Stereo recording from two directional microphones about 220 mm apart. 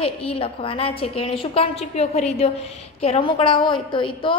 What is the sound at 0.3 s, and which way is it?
A woman's voice, 25° left (ahead or behind).